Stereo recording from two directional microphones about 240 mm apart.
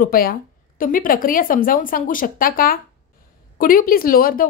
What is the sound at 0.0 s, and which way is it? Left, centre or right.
Speech, left.